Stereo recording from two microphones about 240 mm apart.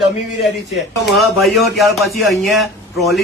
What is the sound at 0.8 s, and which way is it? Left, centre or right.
Speech, centre.